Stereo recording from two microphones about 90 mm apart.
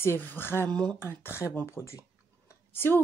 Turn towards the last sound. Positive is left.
turn(degrees=25)  # may be behind; listen again after turning